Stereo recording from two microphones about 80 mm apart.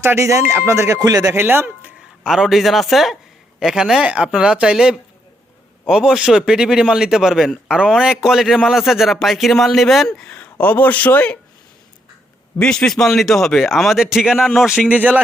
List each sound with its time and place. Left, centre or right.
0.0 s speech: right
0.9 s speech: right
1.4 s speech: right
2.0 s a man's voice: centre
10.3 s speech: centre
12.5 s a man's voice: centre
14.8 s speech: centre